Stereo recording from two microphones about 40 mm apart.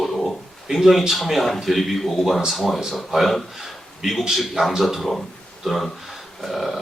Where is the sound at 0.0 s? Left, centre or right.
Centre.